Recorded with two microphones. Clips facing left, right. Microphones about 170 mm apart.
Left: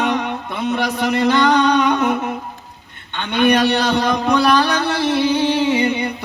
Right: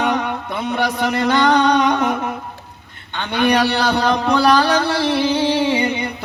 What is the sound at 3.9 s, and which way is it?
Speech, 35° right (ahead or behind).